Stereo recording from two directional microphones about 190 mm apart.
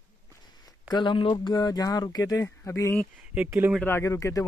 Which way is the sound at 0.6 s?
20° left (ahead or behind).